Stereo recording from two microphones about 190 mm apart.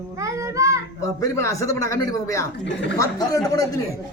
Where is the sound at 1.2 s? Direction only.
15° left (ahead or behind).